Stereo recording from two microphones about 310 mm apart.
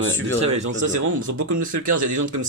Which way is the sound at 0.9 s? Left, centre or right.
Right.